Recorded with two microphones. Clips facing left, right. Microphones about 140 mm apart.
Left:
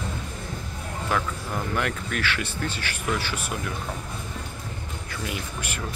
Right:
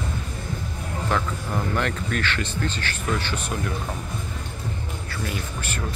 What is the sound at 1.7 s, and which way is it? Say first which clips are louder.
Speech: right 2 dB; 10° left (ahead or behind).